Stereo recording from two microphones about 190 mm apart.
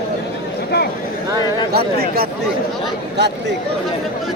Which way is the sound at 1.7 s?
55° right (ahead or behind).